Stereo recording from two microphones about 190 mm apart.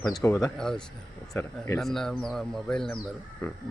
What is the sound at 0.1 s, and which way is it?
Speech, 15° left (ahead or behind).